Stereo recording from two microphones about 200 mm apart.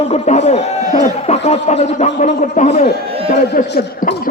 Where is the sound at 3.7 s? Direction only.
50° left (ahead or behind).